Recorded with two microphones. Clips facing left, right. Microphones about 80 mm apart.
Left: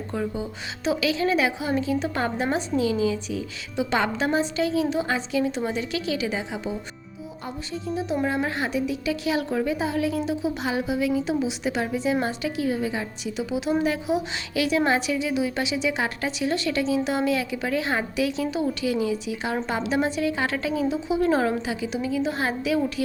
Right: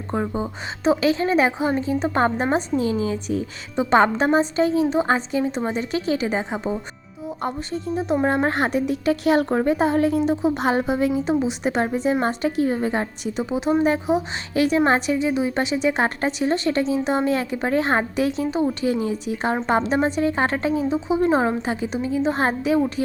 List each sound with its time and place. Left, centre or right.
0.1 s a woman's voice: right
7.9 s a woman's voice: right
21.6 s a woman's voice: right